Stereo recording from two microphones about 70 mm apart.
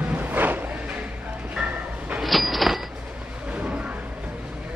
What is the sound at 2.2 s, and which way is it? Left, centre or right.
Train, centre.